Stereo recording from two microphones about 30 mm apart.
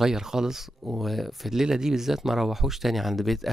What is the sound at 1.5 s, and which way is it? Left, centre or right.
A man's voice, centre.